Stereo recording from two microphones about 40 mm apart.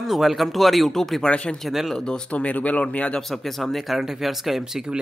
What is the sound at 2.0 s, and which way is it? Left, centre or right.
Speech, left.